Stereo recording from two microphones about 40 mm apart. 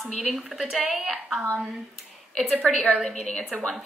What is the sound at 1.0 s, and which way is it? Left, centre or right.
Speech, centre.